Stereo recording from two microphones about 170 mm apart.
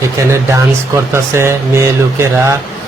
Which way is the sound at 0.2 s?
20° right (ahead or behind).